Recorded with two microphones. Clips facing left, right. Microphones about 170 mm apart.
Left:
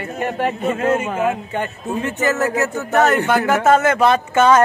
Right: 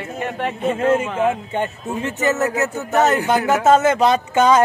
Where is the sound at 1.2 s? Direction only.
20° right (ahead or behind).